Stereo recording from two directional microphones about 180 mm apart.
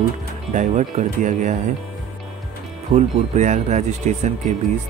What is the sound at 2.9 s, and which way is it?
Speech, 40° right (ahead or behind).